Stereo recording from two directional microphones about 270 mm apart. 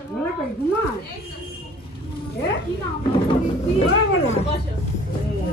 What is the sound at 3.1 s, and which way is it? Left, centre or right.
Speech, centre.